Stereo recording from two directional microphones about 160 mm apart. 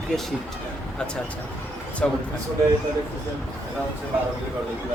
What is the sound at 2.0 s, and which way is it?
Speech, 5° left (ahead or behind).